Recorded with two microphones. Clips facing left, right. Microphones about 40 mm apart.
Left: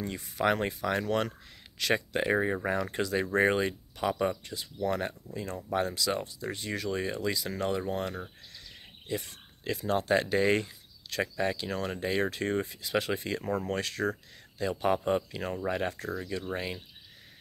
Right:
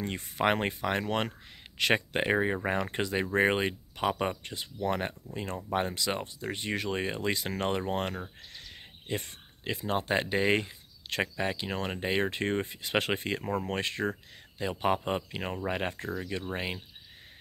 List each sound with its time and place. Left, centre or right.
0.0 s speech: right
8.5 s a sound: right
9.7 s speech: right